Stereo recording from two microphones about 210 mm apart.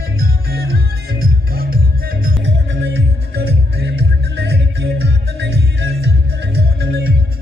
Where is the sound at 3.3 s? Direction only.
50° right (ahead or behind).